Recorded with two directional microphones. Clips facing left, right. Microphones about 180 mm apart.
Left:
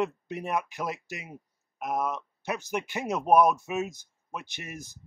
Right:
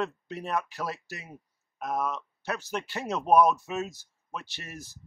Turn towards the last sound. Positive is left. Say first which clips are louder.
# left 2 dB
turn(degrees=15)  # may be behind; listen again after turning